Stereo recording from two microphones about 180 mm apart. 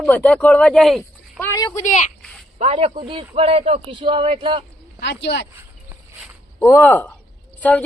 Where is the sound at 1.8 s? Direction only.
45° left (ahead or behind).